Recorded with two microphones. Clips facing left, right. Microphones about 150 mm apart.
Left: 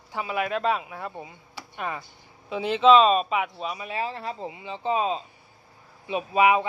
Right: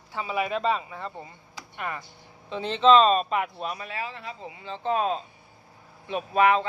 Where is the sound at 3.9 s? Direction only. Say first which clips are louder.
Left 5 dB; 30° left (ahead or behind).